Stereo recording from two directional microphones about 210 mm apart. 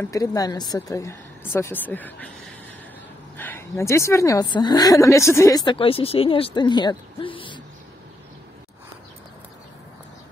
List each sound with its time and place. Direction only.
0.0 s speech: 15° left (ahead or behind)
3.3 s a woman's voice: 10° left (ahead or behind)